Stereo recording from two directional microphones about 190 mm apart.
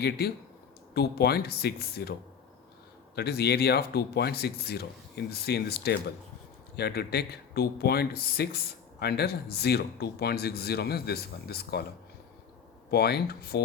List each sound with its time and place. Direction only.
0.0 s speech: 55° left (ahead or behind)
3.2 s speech: 55° left (ahead or behind)
12.9 s speech: 55° left (ahead or behind)